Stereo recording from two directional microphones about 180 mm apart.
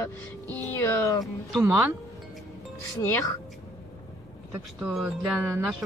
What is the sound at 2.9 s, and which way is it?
Speech, 15° left (ahead or behind).